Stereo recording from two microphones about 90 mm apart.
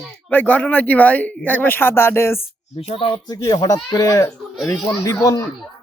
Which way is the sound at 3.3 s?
40° left (ahead or behind).